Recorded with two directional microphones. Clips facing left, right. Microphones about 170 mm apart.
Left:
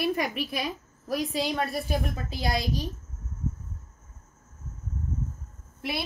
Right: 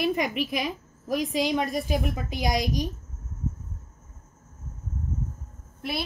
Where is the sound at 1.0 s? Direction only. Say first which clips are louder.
Right 3 dB; 15° right (ahead or behind).